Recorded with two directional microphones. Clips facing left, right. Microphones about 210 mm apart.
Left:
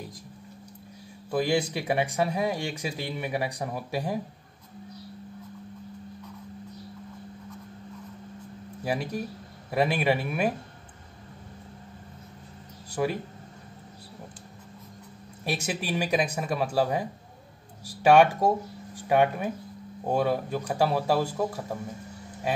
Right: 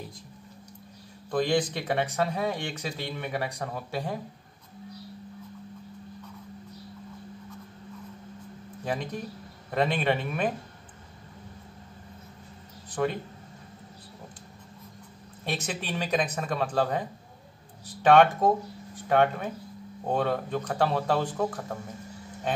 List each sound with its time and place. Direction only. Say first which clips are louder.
1.3 s speech: even; 10° left (ahead or behind)
8.8 s speech: left 2 dB; 10° left (ahead or behind)
12.9 s speech: even; 10° left (ahead or behind)
15.4 s speech: left 2 dB; 10° left (ahead or behind)